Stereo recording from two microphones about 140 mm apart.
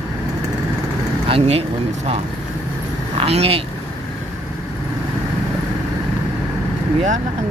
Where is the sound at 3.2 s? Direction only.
45° right (ahead or behind).